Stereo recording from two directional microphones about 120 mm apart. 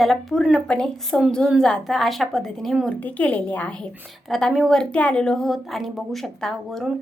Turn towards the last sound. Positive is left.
turn(degrees=0)  # may be behind; listen again after turning